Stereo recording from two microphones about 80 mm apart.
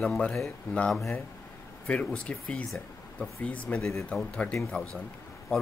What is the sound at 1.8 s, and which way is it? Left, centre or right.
Speech, centre.